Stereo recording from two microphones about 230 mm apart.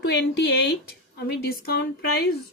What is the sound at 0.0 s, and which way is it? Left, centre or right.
A woman's voice, left.